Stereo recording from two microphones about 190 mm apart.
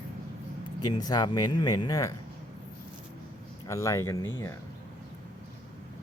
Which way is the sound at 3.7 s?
15° left (ahead or behind).